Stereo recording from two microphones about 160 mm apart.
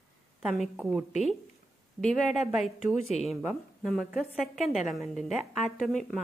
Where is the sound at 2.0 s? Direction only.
5° left (ahead or behind).